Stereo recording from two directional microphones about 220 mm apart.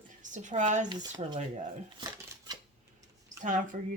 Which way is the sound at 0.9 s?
20° right (ahead or behind).